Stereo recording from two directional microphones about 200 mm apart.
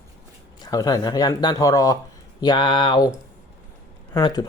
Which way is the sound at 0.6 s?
20° left (ahead or behind).